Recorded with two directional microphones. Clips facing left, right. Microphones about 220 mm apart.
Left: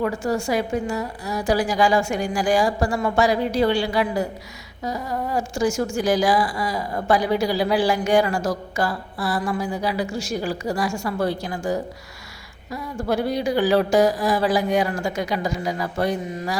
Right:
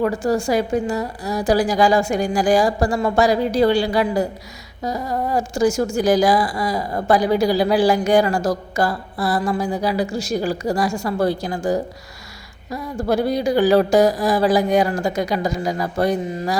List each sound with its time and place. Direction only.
0.0 s a woman's voice: 35° right (ahead or behind)